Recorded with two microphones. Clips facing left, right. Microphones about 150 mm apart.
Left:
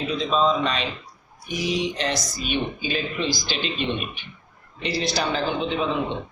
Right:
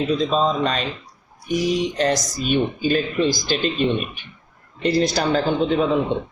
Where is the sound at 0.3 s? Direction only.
40° right (ahead or behind).